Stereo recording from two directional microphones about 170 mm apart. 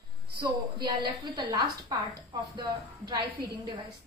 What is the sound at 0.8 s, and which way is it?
A woman's voice, 25° right (ahead or behind).